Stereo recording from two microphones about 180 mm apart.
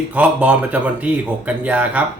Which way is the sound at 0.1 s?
10° right (ahead or behind).